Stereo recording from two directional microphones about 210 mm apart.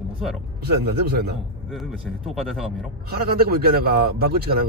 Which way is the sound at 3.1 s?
45° right (ahead or behind).